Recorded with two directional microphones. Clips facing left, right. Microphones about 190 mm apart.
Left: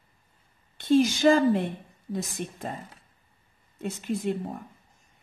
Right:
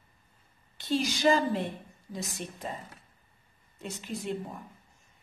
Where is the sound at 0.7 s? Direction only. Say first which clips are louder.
Left 9 dB; 50° left (ahead or behind).